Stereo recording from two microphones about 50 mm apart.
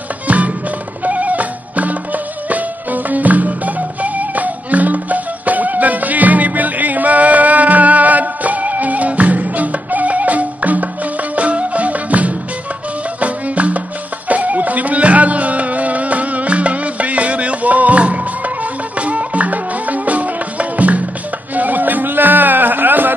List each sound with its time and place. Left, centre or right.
0.3 s music: right